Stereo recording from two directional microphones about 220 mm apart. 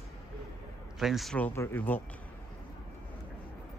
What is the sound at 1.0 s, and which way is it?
Speech, centre (ahead or behind).